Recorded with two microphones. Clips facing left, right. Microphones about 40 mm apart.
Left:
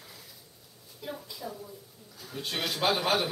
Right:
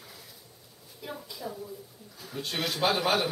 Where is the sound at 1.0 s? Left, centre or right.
Centre.